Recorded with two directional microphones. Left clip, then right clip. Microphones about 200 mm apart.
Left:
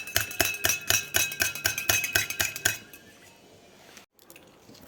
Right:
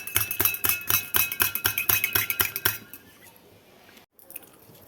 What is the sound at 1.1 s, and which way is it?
Music, 5° left (ahead or behind).